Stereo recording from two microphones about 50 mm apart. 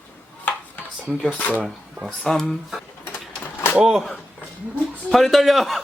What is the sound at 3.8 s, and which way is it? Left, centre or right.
Speech, centre.